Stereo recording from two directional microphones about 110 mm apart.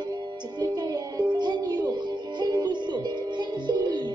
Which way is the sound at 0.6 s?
40° right (ahead or behind).